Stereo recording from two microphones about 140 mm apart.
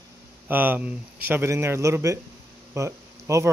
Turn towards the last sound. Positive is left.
turn(degrees=-20)  # may be behind; listen again after turning